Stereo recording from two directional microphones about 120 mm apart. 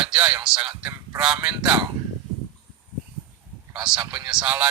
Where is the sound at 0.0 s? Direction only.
10° right (ahead or behind).